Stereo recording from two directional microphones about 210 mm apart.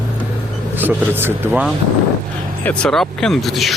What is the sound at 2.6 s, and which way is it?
Speech, 5° left (ahead or behind).